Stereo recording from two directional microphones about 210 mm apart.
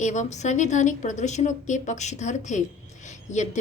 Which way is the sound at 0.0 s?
35° left (ahead or behind).